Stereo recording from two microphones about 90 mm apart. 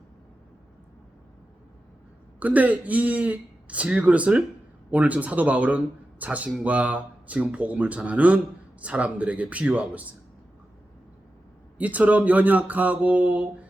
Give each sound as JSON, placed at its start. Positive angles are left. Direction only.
{"t": 2.4, "sound": "speech", "side_deg": -15}
{"t": 11.8, "sound": "speech", "side_deg": -15}